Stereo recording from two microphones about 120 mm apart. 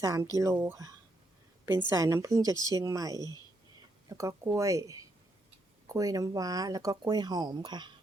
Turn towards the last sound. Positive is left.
turn(degrees=-35)  # may be behind; listen again after turning